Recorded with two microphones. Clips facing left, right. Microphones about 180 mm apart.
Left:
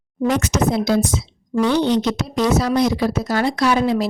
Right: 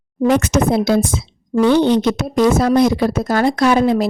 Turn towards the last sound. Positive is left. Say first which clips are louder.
# right 4 dB
turn(degrees=-50)  # may be behind; listen again after turning